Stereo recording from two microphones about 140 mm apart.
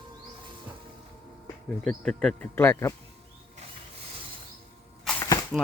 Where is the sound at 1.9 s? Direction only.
5° left (ahead or behind).